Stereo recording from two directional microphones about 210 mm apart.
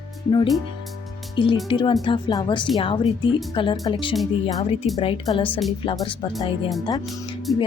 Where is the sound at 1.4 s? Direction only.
20° left (ahead or behind).